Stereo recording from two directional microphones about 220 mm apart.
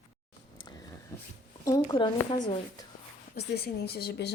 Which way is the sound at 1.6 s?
15° left (ahead or behind).